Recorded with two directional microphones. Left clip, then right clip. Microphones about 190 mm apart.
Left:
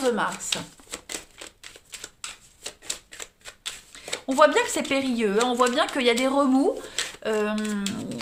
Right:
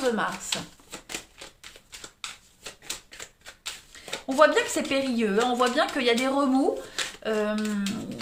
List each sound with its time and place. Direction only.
0.0 s speech: 30° left (ahead or behind)
3.9 s speech: 35° left (ahead or behind)